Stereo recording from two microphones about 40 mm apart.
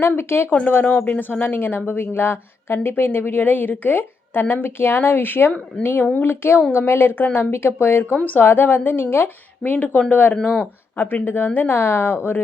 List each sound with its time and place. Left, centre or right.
0.2 s speech: left
0.9 s speech: left
1.9 s speech: left
3.0 s speech: left
6.2 s speech: left
8.4 s speech: left
10.4 s speech: left